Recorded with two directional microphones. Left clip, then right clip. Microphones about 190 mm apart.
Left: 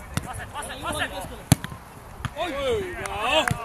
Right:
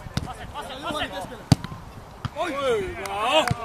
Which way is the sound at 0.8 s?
15° right (ahead or behind).